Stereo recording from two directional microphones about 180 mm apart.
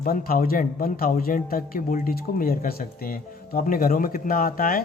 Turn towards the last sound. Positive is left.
turn(degrees=50)  # may be behind; listen again after turning